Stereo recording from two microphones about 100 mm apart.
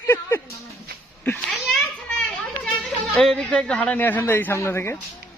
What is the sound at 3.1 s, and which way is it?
Speech, 10° left (ahead or behind).